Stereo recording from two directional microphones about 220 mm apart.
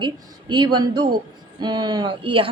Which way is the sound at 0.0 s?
20° right (ahead or behind).